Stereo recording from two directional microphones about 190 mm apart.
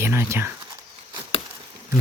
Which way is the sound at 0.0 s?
15° right (ahead or behind).